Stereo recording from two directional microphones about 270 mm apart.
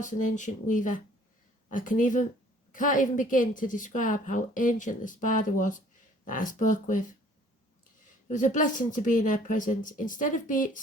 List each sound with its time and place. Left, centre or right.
0.0 s speech: left
8.3 s speech: left